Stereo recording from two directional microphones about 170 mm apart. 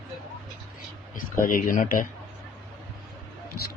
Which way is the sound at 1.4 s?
55° left (ahead or behind).